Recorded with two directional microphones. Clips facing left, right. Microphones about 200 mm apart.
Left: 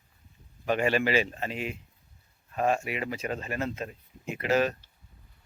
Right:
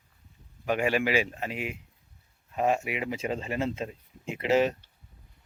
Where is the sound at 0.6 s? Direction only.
10° right (ahead or behind).